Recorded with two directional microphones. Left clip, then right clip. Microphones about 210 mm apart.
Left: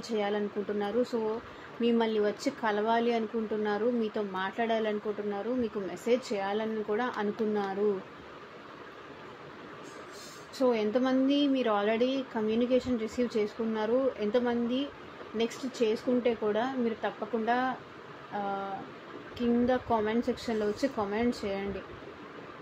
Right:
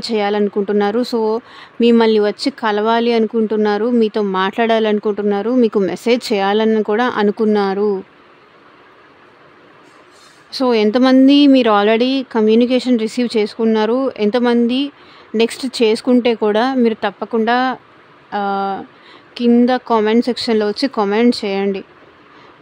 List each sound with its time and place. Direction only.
0.0 s speech: 40° right (ahead or behind)
10.6 s speech: 45° right (ahead or behind)